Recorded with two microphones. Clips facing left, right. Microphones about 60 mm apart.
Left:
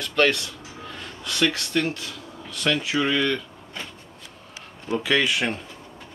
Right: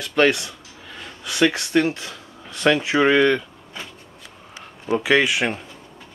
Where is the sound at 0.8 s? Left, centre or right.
Centre; by 3.4 s right.